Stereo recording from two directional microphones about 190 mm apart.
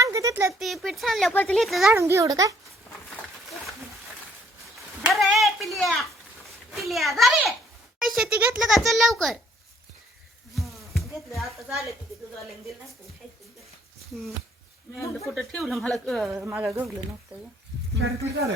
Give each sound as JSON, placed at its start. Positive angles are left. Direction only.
{"t": 0.0, "sound": "a sound", "side_deg": -15}
{"t": 0.6, "sound": "speech", "side_deg": 0}
{"t": 2.0, "sound": "a child's voice", "side_deg": -15}
{"t": 5.0, "sound": "speech", "side_deg": 0}
{"t": 10.5, "sound": "a sound", "side_deg": 0}
{"t": 11.3, "sound": "speech", "side_deg": 0}
{"t": 14.9, "sound": "speech", "side_deg": 10}
{"t": 15.4, "sound": "speech", "side_deg": 0}